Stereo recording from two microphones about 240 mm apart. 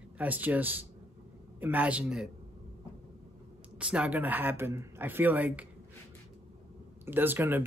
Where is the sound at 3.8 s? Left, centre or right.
Centre.